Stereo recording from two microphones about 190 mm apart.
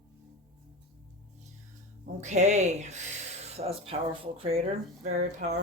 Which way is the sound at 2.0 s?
40° right (ahead or behind).